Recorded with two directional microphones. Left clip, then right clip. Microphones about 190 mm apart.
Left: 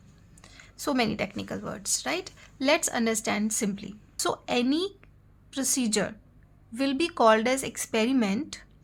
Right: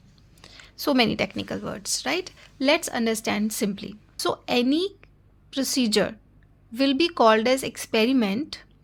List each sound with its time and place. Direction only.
0.4 s a woman's voice: 20° right (ahead or behind)